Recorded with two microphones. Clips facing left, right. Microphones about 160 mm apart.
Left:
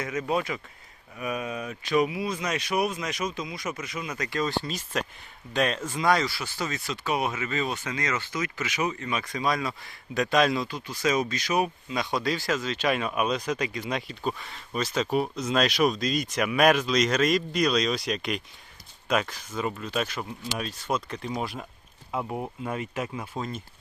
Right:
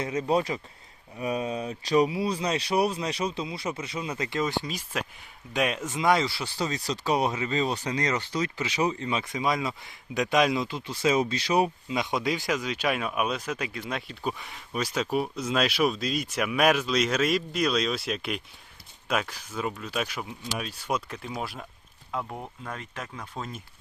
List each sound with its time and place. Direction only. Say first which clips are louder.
0.0 s speech: right 2 dB; 30° right (ahead or behind); by 14.2 s 5° left (ahead or behind)
14.3 s speech: right 1 dB; 15° right (ahead or behind)
22.1 s speech: left 3 dB; 15° left (ahead or behind)